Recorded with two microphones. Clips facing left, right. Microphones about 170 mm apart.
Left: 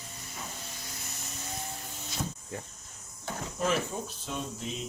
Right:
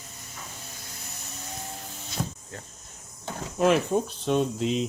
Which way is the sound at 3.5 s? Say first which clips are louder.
Right 9 dB; 70° right (ahead or behind).